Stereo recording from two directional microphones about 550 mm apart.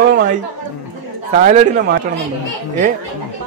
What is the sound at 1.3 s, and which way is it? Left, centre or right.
Speech, centre.